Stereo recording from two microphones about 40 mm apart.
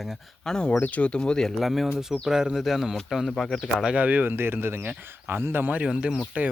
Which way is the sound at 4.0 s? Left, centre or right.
Right.